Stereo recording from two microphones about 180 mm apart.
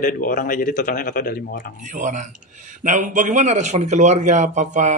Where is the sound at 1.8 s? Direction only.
45° right (ahead or behind).